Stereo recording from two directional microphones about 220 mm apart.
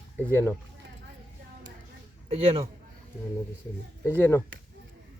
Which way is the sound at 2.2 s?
25° right (ahead or behind).